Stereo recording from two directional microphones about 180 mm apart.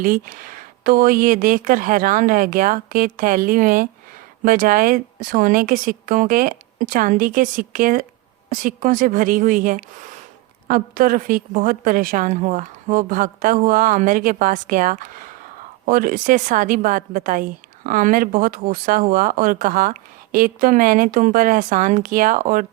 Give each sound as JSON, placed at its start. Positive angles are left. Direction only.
{"t": 0.0, "sound": "a woman's voice", "side_deg": -50}